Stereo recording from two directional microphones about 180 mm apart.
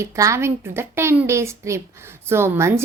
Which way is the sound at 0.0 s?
15° right (ahead or behind).